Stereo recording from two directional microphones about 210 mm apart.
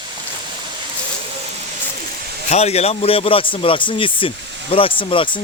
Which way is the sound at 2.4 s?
30° left (ahead or behind).